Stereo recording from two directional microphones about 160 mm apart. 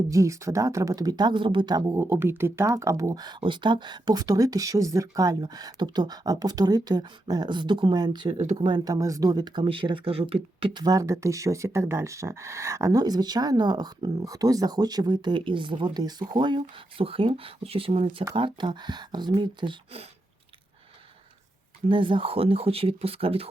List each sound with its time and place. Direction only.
0.1 s speech: 20° right (ahead or behind); by 20.1 s 35° right (ahead or behind)
21.8 s speech: 30° right (ahead or behind)